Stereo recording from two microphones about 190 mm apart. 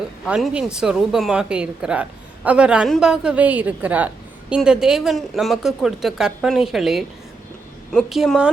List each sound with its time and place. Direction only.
0.3 s a woman's voice: 5° right (ahead or behind)